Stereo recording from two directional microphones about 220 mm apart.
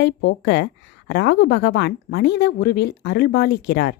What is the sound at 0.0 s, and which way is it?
A woman's voice, 50° left (ahead or behind).